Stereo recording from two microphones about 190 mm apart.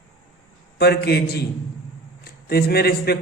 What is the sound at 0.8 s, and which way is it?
A man's voice, 60° left (ahead or behind).